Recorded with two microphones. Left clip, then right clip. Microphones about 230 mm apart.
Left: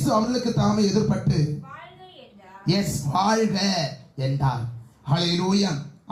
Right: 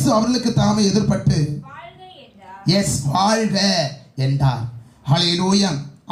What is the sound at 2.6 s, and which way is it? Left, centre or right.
Speech, right.